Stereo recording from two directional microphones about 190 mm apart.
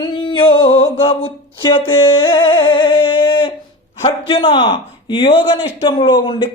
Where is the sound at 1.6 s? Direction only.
25° left (ahead or behind).